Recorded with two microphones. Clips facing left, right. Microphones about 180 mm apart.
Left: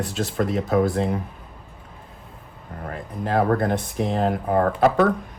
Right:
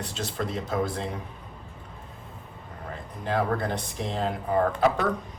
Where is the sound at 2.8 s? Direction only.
55° left (ahead or behind).